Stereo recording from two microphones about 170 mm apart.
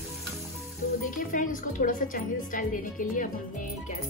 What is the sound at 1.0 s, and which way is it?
A woman's voice, 50° left (ahead or behind).